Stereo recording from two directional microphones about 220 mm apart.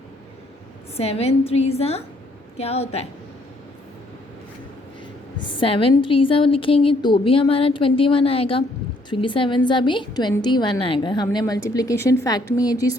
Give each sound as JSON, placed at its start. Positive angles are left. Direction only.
{"t": 0.9, "sound": "a woman's voice", "side_deg": 25}
{"t": 5.5, "sound": "a woman's voice", "side_deg": 25}